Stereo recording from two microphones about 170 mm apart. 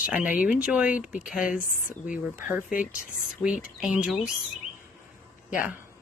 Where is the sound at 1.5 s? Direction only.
50° left (ahead or behind).